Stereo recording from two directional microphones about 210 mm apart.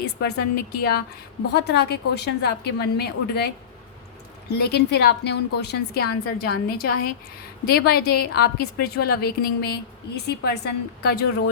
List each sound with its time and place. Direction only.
0.0 s a woman's voice: 50° left (ahead or behind)
4.5 s a woman's voice: 50° left (ahead or behind)